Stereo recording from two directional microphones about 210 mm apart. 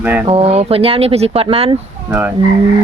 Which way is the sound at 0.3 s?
30° right (ahead or behind).